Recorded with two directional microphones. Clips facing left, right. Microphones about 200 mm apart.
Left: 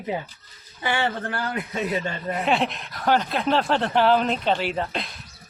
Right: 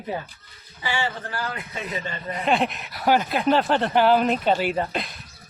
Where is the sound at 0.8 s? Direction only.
55° left (ahead or behind).